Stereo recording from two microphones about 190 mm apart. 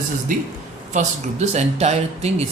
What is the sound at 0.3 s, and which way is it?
A man's voice, 40° right (ahead or behind).